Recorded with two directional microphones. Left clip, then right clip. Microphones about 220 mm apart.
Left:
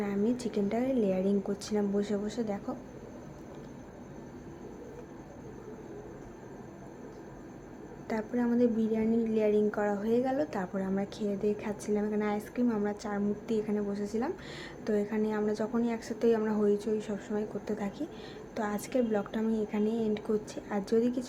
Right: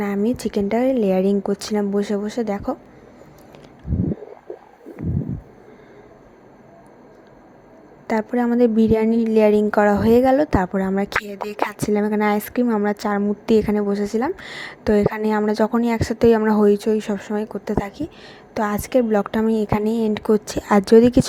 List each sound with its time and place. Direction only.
0.0 s a woman's voice: 35° right (ahead or behind)
8.0 s a woman's voice: 35° right (ahead or behind)